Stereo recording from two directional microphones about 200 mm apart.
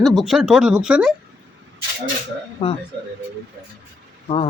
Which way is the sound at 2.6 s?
30° left (ahead or behind).